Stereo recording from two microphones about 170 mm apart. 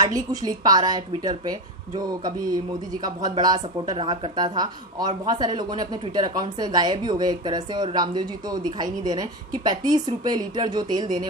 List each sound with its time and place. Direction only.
0.0 s speech: 20° right (ahead or behind)